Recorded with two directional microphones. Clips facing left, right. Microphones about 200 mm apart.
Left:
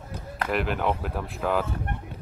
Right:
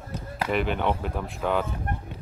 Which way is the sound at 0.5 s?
Centre (ahead or behind).